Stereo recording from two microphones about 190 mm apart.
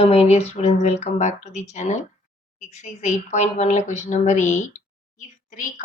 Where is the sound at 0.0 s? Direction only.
30° left (ahead or behind).